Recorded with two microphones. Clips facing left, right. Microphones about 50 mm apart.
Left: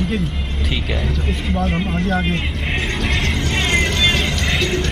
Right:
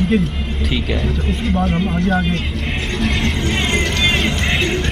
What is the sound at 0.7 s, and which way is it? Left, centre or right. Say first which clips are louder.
Speech: right 2 dB; centre.